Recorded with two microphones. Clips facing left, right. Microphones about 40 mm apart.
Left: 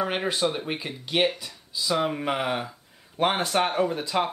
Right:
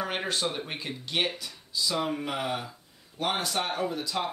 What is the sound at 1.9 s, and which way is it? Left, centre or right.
Speech, left.